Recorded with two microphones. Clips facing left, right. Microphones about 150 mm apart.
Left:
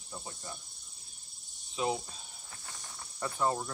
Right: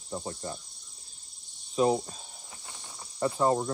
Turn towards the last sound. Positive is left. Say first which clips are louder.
# right 7 dB
turn(degrees=-30)  # may be behind; listen again after turning